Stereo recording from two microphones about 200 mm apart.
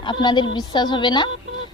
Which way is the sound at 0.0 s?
20° left (ahead or behind).